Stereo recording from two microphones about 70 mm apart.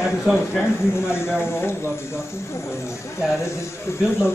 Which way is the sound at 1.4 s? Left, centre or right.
Left.